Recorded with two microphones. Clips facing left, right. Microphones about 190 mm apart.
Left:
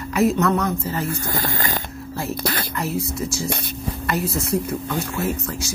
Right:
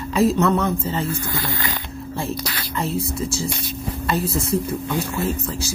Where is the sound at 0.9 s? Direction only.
30° right (ahead or behind).